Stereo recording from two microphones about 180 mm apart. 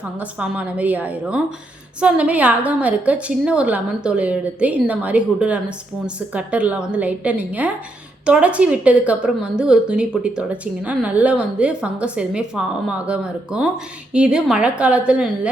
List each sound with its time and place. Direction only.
0.2 s a woman's voice: 10° right (ahead or behind)